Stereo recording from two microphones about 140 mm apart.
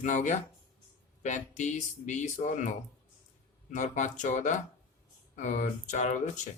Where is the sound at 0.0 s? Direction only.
60° left (ahead or behind).